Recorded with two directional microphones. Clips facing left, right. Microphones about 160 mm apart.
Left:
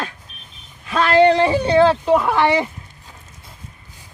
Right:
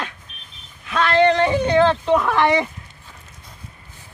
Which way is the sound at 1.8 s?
10° left (ahead or behind).